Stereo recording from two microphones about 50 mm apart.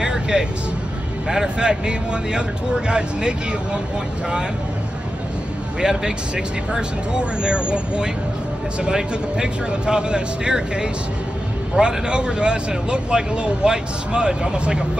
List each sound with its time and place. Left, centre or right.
0.0 s vehicle: centre
1.3 s speech: centre
5.8 s speech: centre